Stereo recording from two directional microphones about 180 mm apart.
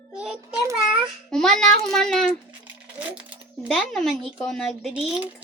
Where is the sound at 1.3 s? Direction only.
5° left (ahead or behind).